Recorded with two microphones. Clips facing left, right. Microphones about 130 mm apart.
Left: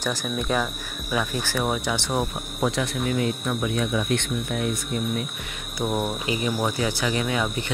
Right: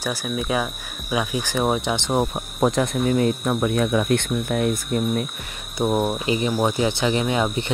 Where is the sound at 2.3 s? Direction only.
40° right (ahead or behind).